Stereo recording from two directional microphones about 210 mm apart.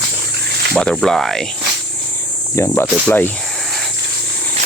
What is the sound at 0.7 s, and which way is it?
Speech, 5° left (ahead or behind).